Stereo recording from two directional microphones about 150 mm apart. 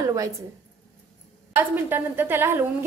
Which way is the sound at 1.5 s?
15° right (ahead or behind).